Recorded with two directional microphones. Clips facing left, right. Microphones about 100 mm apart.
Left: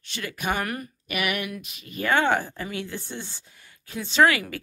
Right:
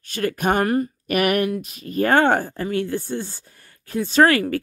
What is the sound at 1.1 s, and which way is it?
Speech, 45° right (ahead or behind).